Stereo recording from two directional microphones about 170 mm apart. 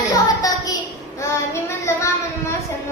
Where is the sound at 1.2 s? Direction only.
15° left (ahead or behind).